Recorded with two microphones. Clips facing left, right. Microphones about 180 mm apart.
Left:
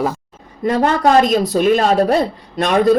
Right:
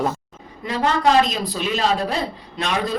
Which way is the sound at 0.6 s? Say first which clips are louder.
Left 5 dB; 50° left (ahead or behind).